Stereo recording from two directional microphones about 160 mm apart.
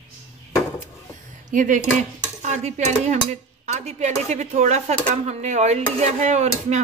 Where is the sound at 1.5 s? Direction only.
55° right (ahead or behind).